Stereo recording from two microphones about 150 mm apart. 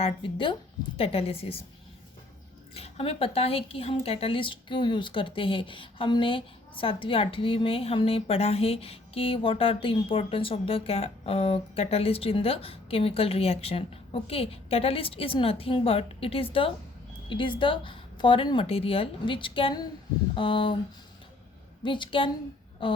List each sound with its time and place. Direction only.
0.0 s speech: 35° left (ahead or behind)
2.7 s speech: 40° left (ahead or behind)
21.8 s speech: 30° left (ahead or behind)